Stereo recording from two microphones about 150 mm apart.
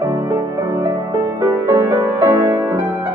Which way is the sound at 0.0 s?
25° right (ahead or behind).